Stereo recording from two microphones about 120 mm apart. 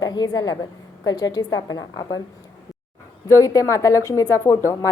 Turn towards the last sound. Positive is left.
turn(degrees=25)  # may be behind; listen again after turning